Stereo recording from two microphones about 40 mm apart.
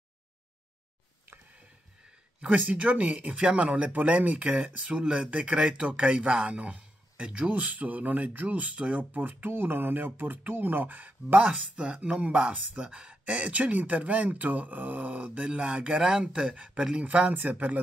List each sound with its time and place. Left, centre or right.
2.5 s speech: right
3.3 s speech: right
4.8 s speech: right
7.5 s speech: right
8.7 s speech: right
9.1 s speech: right
11.7 s speech: right
17.0 s speech: right